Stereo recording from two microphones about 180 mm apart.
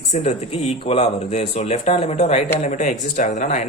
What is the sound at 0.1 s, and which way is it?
Speech, 35° left (ahead or behind).